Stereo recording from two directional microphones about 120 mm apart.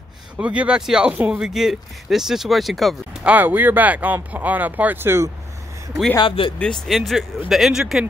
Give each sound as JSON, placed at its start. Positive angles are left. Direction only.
{"t": 0.4, "sound": "speech", "side_deg": -10}
{"t": 3.3, "sound": "speech", "side_deg": -15}
{"t": 6.2, "sound": "speech", "side_deg": 45}
{"t": 6.6, "sound": "speech", "side_deg": 5}